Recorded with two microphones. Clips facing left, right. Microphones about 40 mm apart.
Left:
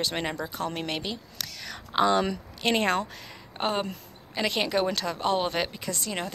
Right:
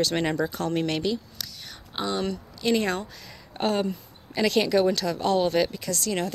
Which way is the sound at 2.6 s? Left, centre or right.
Left.